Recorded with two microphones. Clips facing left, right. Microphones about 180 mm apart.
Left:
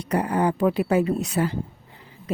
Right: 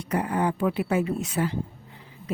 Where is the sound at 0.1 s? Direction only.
40° left (ahead or behind).